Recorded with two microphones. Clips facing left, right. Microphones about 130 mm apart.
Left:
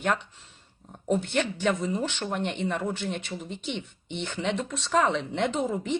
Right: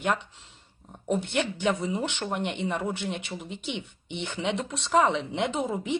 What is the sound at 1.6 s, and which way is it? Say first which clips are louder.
Speech: even; 15° right (ahead or behind).